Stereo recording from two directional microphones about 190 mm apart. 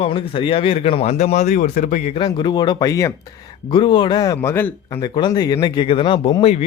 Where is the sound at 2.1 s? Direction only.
25° left (ahead or behind).